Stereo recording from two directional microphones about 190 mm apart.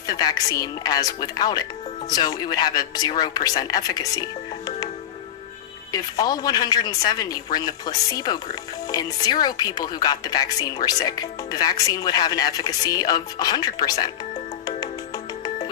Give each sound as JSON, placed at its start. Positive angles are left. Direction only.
{"t": 0.1, "sound": "speech", "side_deg": 20}
{"t": 5.9, "sound": "speech", "side_deg": 20}
{"t": 14.8, "sound": "music", "side_deg": 20}